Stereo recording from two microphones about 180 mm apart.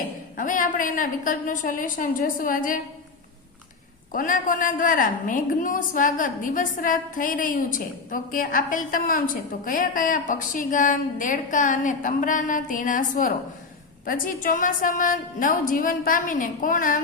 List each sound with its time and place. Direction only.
0.3 s a woman's voice: 45° left (ahead or behind)
4.1 s a woman's voice: 50° left (ahead or behind)